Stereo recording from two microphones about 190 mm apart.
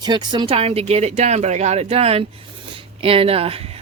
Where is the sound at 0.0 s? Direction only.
20° right (ahead or behind).